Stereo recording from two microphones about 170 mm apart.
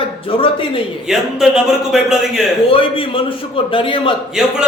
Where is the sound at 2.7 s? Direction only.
30° left (ahead or behind).